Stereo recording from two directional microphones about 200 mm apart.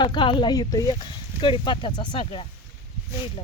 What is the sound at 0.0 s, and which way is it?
Speech, 25° left (ahead or behind).